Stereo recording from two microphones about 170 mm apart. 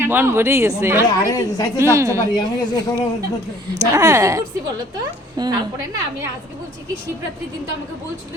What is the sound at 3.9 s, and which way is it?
A woman's voice, 20° right (ahead or behind).